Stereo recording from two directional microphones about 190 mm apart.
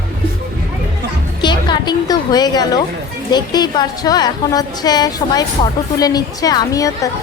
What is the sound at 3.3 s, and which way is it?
A woman's voice, 20° left (ahead or behind).